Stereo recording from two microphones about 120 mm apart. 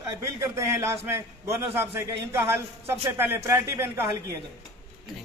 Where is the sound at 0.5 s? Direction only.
25° right (ahead or behind).